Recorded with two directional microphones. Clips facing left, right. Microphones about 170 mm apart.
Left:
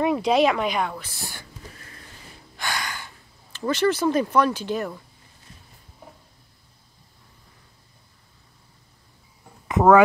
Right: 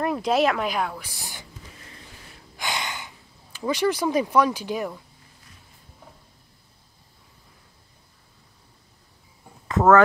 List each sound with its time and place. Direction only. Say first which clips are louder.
0.0 s a woman's voice: left 2 dB; centre (ahead or behind)
9.7 s speech: left 1 dB; 15° left (ahead or behind)